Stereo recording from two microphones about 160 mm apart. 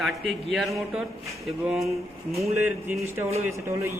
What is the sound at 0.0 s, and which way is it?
A man's voice, centre (ahead or behind).